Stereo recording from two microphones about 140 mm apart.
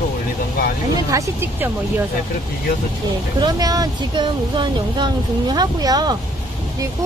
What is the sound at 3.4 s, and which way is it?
Speech, 30° right (ahead or behind).